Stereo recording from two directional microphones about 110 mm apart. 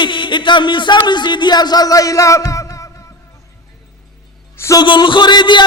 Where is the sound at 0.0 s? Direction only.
45° left (ahead or behind); by 2.9 s 30° left (ahead or behind).